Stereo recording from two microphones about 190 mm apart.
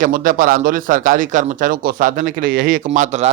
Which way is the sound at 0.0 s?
45° right (ahead or behind).